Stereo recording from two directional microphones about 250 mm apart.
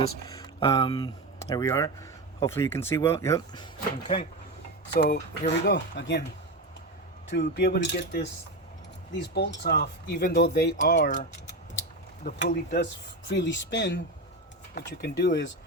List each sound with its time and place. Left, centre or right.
0.3 s speech: centre
4.0 s speech: left
7.3 s speech: left
15.0 s speech: left